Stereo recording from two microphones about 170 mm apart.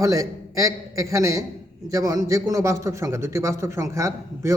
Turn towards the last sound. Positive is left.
turn(degrees=-15)  # may be behind; listen again after turning